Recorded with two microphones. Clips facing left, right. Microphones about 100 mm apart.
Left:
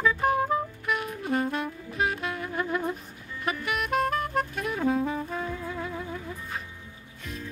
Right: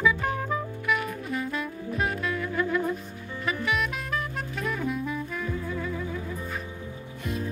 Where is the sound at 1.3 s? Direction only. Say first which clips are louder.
Left 6 dB; 60° left (ahead or behind).